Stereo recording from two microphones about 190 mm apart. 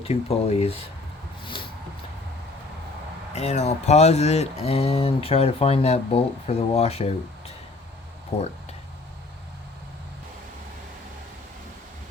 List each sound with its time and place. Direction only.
0.0 s speech: 35° left (ahead or behind)
3.3 s speech: 35° left (ahead or behind)